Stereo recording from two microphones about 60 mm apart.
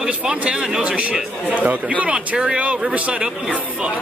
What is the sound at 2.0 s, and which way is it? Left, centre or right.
A man's voice, centre.